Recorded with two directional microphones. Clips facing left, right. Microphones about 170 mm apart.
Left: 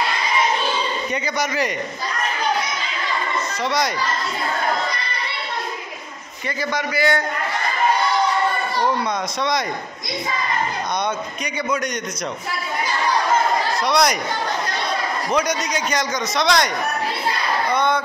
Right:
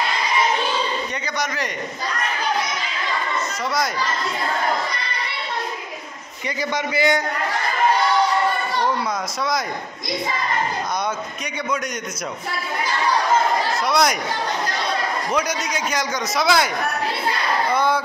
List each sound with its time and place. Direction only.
1.2 s a man's voice: 5° left (ahead or behind)
6.7 s a man's voice: 20° right (ahead or behind)
13.8 s a man's voice: centre (ahead or behind)
15.3 s a man's voice: 5° right (ahead or behind)